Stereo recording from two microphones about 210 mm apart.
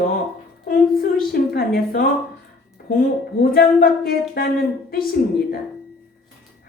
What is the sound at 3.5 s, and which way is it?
Speech, 45° left (ahead or behind).